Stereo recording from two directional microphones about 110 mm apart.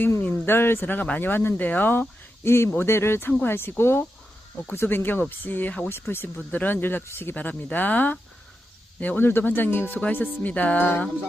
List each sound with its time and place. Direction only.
0.2 s speech: 15° left (ahead or behind)